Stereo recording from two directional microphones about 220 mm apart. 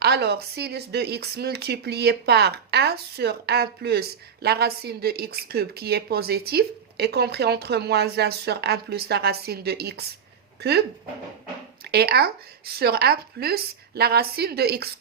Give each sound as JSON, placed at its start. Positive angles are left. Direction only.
{"t": 0.0, "sound": "speech", "side_deg": -50}
{"t": 11.9, "sound": "speech", "side_deg": -45}